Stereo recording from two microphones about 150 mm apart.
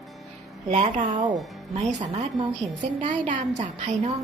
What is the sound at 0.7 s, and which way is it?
Speech, 50° right (ahead or behind).